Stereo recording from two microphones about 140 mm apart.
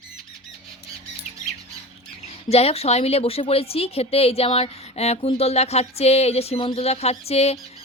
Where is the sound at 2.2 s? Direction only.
45° left (ahead or behind).